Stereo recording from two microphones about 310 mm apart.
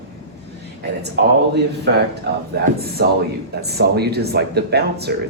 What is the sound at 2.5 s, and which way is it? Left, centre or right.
Speech, right.